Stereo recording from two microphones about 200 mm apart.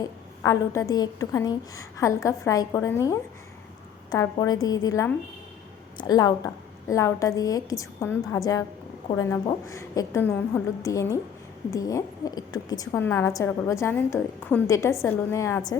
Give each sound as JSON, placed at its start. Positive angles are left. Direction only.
{"t": 0.4, "sound": "a woman's voice", "side_deg": 15}